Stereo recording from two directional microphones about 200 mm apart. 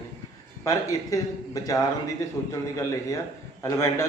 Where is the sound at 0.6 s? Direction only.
15° left (ahead or behind).